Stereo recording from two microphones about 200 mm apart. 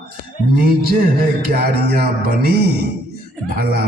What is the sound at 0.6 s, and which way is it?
A man's voice, 50° right (ahead or behind).